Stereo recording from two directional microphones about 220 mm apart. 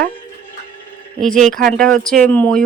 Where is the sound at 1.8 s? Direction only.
40° right (ahead or behind).